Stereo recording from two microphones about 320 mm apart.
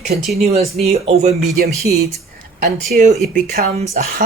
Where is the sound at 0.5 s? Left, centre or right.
Centre.